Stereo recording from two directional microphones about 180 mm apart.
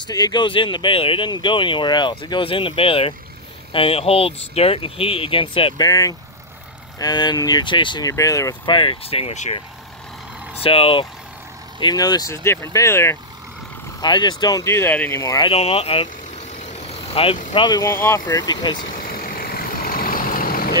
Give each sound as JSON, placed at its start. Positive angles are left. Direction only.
{"t": 0.0, "sound": "speech", "side_deg": 25}
{"t": 10.6, "sound": "speech", "side_deg": 30}
{"t": 15.4, "sound": "vehicle", "side_deg": 35}
{"t": 17.6, "sound": "speech", "side_deg": 20}
{"t": 18.9, "sound": "vehicle", "side_deg": 55}